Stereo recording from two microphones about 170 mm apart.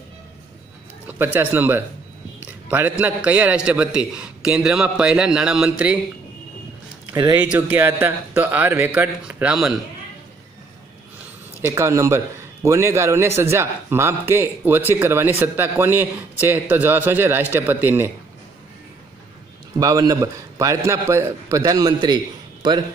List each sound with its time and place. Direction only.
1.0 s a man's voice: 10° right (ahead or behind)
7.1 s speech: 20° right (ahead or behind)
7.7 s speech: 10° right (ahead or behind)
11.6 s speech: 15° right (ahead or behind)
19.8 s a man's voice: 20° right (ahead or behind)